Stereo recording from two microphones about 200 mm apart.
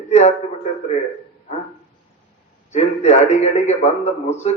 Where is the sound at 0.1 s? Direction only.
35° left (ahead or behind).